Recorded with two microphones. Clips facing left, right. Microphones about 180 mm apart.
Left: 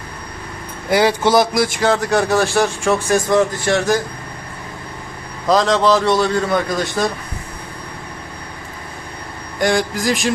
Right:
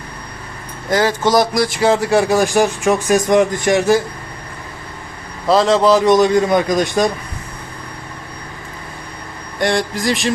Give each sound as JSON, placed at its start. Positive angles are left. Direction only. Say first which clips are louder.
{"t": 0.9, "sound": "speech", "louder": "left 1 dB", "side_deg": 10}
{"t": 5.5, "sound": "speech", "louder": "right 2 dB", "side_deg": -5}
{"t": 9.6, "sound": "speech", "louder": "even", "side_deg": 0}